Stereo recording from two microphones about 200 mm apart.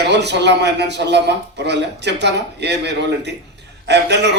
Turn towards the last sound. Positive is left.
turn(degrees=-60)  # may be behind; listen again after turning